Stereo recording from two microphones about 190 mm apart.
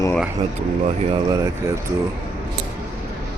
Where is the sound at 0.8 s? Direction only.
35° right (ahead or behind).